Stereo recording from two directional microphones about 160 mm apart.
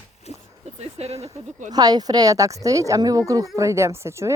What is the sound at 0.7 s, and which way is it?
Speech, 40° right (ahead or behind).